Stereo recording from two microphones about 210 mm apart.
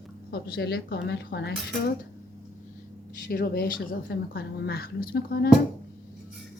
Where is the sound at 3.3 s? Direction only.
45° left (ahead or behind).